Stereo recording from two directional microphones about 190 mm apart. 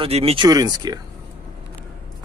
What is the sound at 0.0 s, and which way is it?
Speech, 30° right (ahead or behind).